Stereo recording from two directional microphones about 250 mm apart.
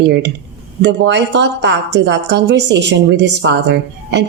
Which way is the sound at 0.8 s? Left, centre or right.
Right.